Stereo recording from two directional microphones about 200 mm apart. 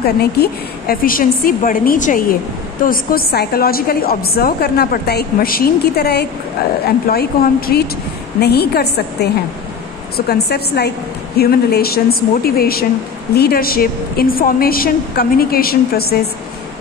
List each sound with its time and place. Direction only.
0.0 s a woman's voice: 50° left (ahead or behind)